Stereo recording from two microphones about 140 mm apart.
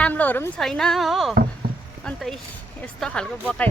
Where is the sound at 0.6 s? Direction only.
5° left (ahead or behind).